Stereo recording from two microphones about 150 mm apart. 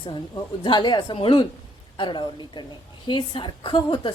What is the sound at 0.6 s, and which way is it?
Speech, 30° left (ahead or behind).